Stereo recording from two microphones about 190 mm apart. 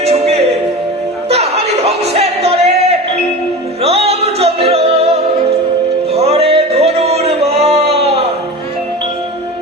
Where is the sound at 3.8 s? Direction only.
30° right (ahead or behind).